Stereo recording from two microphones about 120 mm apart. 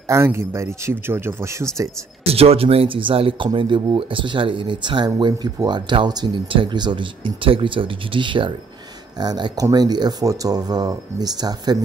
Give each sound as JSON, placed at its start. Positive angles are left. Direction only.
{"t": 0.0, "sound": "speech", "side_deg": -20}
{"t": 2.2, "sound": "speech", "side_deg": -55}